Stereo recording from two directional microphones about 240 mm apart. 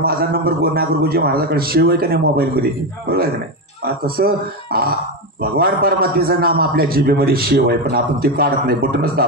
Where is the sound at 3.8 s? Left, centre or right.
Right.